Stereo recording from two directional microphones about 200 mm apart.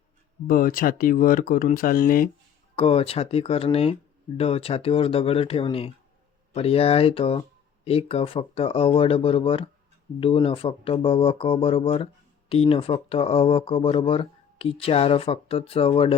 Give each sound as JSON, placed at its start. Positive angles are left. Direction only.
{"t": 0.4, "sound": "speech", "side_deg": 45}
{"t": 2.7, "sound": "speech", "side_deg": 30}